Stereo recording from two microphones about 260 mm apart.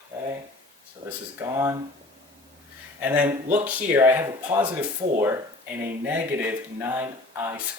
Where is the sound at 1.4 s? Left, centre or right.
Centre.